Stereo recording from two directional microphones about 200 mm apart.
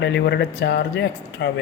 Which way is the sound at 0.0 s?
60° left (ahead or behind).